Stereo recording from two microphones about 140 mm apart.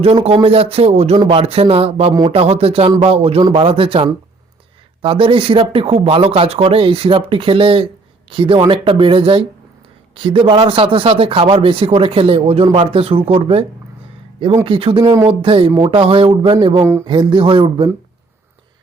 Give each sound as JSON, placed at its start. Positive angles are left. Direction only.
{"t": 0.0, "sound": "a man's voice", "side_deg": -45}
{"t": 5.0, "sound": "speech", "side_deg": -40}